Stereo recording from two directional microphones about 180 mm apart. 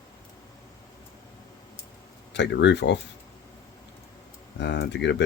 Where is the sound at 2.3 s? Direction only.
75° left (ahead or behind).